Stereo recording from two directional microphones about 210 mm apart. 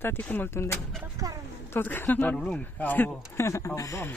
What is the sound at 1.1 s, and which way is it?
Speech, 15° right (ahead or behind).